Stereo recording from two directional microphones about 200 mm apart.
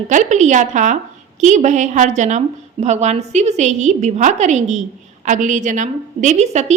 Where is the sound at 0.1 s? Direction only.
35° right (ahead or behind).